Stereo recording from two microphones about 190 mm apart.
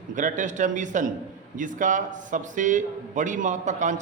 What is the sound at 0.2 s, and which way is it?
A man's voice, 40° right (ahead or behind).